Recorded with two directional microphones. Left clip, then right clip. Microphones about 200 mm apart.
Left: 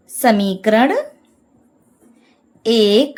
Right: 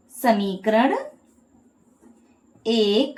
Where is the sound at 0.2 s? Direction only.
60° left (ahead or behind).